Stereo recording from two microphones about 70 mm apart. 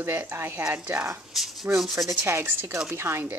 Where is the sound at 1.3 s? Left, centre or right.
Centre.